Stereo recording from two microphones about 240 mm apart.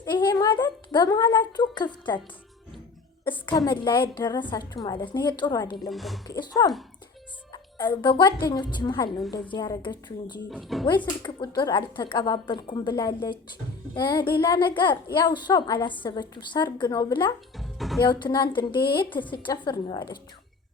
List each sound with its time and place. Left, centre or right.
0.0 s a woman's voice: centre
3.2 s a woman's voice: centre
5.9 s speech: centre
6.2 s a woman's voice: centre
9.0 s speech: centre
9.3 s a woman's voice: centre
10.5 s speech: centre
10.8 s a woman's voice: centre
17.6 s speech: centre
18.0 s a woman's voice: centre